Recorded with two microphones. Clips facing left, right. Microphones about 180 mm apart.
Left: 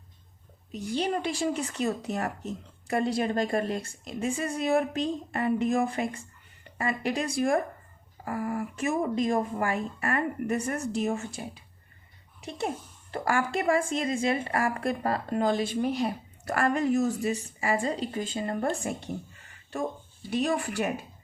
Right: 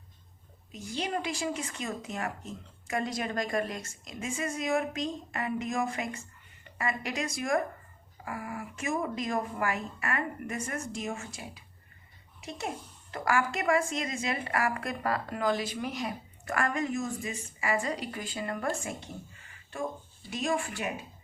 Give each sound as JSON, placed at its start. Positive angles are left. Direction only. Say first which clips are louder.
{"t": 0.9, "sound": "a woman's voice", "louder": "left 4 dB", "side_deg": 30}
{"t": 12.4, "sound": "a woman's voice", "louder": "left 4 dB", "side_deg": 30}
{"t": 20.3, "sound": "a woman's voice", "louder": "left 4 dB", "side_deg": 35}